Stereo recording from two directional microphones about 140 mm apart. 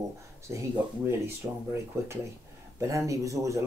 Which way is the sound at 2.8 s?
20° right (ahead or behind).